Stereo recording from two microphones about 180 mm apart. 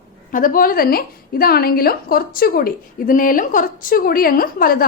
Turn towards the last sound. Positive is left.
turn(degrees=55)  # may be behind; listen again after turning